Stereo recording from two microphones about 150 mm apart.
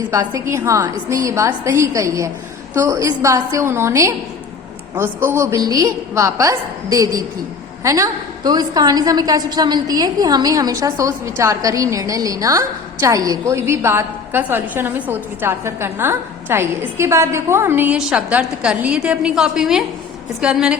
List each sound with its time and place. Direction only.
0.1 s a woman's voice: 20° right (ahead or behind)